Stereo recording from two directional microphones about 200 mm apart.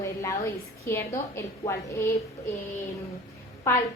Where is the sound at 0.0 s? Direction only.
15° left (ahead or behind).